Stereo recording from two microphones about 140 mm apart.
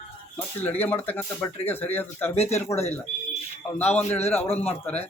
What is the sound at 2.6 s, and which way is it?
Speech, 20° left (ahead or behind).